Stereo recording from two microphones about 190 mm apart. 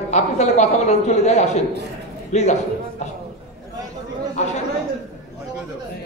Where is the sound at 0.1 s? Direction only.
35° left (ahead or behind).